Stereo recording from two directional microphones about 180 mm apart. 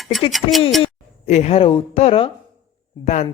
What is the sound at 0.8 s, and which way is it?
A woman's voice, 40° left (ahead or behind).